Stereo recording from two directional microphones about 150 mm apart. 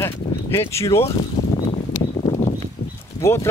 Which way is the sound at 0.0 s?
15° left (ahead or behind).